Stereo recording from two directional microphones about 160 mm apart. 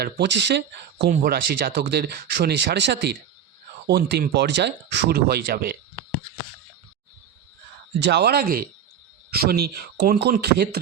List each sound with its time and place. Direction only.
0.0 s speech: 90° right
1.1 s speech: 65° right (ahead or behind)
8.0 s speech: 90° right